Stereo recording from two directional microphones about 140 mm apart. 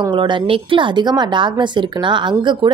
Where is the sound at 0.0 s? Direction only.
35° right (ahead or behind).